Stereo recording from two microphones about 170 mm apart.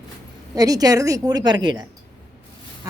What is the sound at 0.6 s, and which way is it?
A woman's voice, 20° right (ahead or behind).